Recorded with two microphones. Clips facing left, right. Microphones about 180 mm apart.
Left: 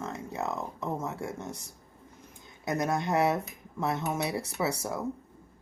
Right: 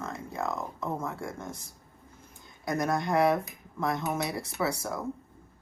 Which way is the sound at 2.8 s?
25° left (ahead or behind).